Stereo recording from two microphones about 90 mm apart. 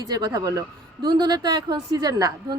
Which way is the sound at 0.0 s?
50° right (ahead or behind).